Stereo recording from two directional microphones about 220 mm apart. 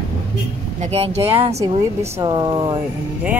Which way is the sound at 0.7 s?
30° right (ahead or behind).